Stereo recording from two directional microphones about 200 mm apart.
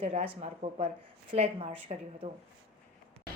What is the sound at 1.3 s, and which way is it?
Speech, 30° right (ahead or behind).